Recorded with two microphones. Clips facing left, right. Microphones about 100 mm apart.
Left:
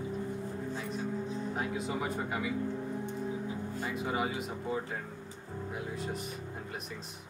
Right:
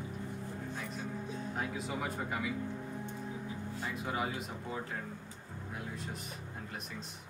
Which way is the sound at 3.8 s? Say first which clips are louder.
Left 3 dB; 5° left (ahead or behind).